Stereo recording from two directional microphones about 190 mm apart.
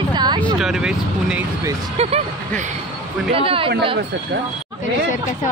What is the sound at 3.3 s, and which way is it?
Speech, 30° right (ahead or behind).